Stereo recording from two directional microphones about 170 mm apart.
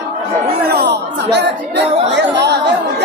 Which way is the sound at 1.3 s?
90° right.